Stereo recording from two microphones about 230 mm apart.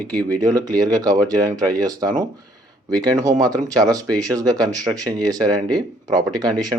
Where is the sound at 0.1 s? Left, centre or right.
Centre.